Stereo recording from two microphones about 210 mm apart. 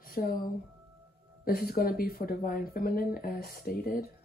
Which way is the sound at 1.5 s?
45° left (ahead or behind).